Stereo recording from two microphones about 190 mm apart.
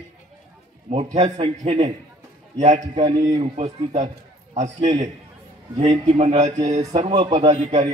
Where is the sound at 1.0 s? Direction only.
25° right (ahead or behind).